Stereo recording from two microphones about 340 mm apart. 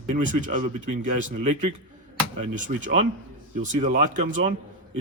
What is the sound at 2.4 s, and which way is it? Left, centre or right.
Speech, right.